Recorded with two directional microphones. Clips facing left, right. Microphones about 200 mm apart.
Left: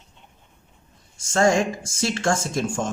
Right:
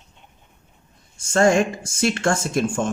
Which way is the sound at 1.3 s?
55° right (ahead or behind).